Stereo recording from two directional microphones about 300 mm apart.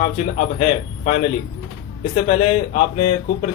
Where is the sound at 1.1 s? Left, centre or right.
Left.